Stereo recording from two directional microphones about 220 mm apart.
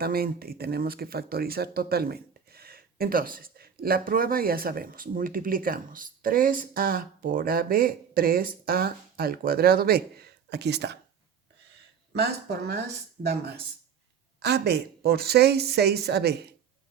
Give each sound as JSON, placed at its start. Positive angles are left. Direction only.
{"t": 0.0, "sound": "speech", "side_deg": -45}
{"t": 12.1, "sound": "speech", "side_deg": -45}